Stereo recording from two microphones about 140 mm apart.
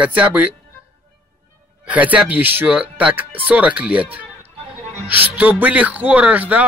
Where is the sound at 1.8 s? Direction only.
10° right (ahead or behind).